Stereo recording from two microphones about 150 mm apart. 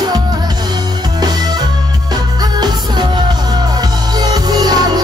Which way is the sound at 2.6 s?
30° right (ahead or behind).